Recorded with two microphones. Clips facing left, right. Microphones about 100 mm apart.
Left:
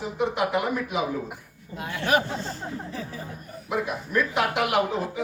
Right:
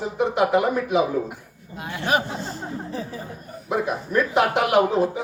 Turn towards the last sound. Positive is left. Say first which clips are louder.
# right 6 dB
turn(degrees=-35)  # may be behind; listen again after turning